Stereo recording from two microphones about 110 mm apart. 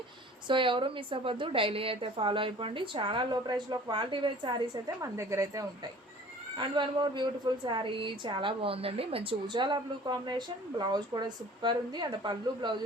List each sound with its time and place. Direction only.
0.4 s a woman's voice: 50° right (ahead or behind)
4.9 s a woman's voice: 25° right (ahead or behind)
6.6 s a woman's voice: 45° right (ahead or behind)
9.5 s a woman's voice: 45° right (ahead or behind)